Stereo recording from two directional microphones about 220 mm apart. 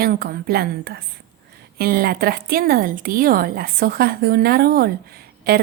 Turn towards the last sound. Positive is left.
turn(degrees=-45)  # may be behind; listen again after turning